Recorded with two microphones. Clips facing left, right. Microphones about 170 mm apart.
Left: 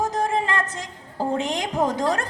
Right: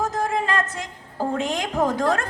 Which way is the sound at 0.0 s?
20° left (ahead or behind).